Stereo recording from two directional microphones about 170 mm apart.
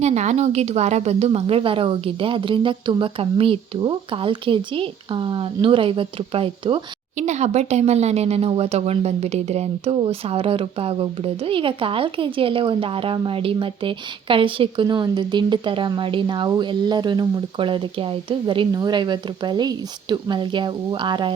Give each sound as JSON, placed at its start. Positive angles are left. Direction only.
{"t": 0.0, "sound": "speech", "side_deg": -40}
{"t": 7.2, "sound": "speech", "side_deg": -45}